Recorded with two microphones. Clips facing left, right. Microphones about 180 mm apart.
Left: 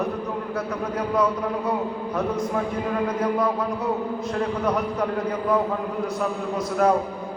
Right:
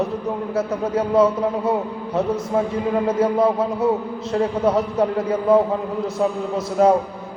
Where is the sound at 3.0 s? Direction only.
25° right (ahead or behind).